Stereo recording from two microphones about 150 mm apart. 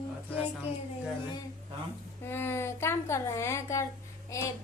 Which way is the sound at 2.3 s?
15° left (ahead or behind).